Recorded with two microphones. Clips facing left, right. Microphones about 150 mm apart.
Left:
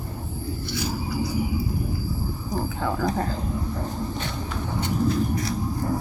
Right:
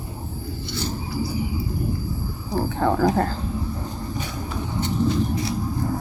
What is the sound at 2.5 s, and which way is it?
Speech, 35° right (ahead or behind).